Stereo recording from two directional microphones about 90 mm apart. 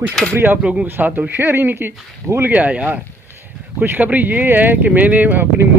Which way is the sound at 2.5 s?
15° right (ahead or behind).